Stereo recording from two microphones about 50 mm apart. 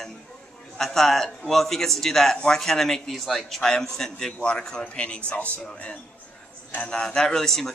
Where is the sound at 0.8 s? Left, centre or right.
Centre.